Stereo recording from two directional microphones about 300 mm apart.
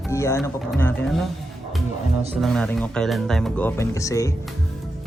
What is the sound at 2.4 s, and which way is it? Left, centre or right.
Speech, centre.